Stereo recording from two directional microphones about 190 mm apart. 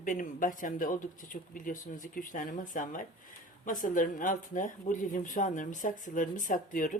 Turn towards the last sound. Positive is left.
turn(degrees=45)  # may be behind; listen again after turning